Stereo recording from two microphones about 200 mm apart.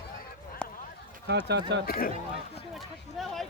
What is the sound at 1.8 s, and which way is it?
Speech, 45° left (ahead or behind).